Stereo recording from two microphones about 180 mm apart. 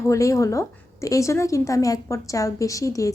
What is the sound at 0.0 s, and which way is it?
A woman's voice, 15° left (ahead or behind).